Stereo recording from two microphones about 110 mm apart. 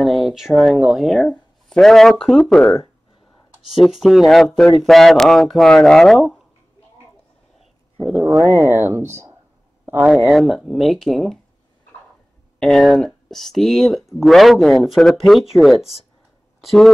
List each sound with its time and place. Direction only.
0.0 s speech: centre (ahead or behind)
3.7 s speech: centre (ahead or behind)
8.0 s speech: 10° right (ahead or behind)
8.4 s speech: 20° right (ahead or behind); by 11.3 s 5° left (ahead or behind)
12.5 s speech: 5° left (ahead or behind)